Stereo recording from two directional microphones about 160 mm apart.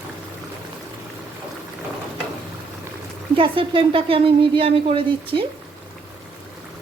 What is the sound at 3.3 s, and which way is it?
Speech, 35° right (ahead or behind).